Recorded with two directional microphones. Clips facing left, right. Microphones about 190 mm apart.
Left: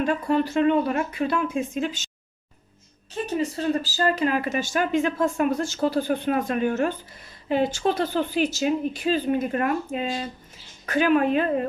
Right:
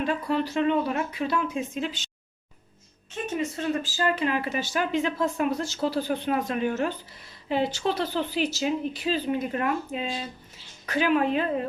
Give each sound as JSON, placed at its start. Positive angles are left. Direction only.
{"t": 0.0, "sound": "speech", "side_deg": 50}
{"t": 3.1, "sound": "speech", "side_deg": 35}